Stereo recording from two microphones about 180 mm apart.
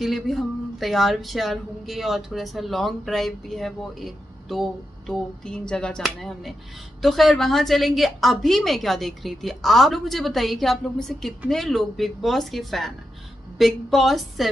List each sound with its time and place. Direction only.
0.0 s speech: centre (ahead or behind)